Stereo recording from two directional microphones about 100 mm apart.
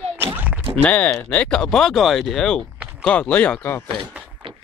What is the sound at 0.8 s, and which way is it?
Speech, 15° left (ahead or behind).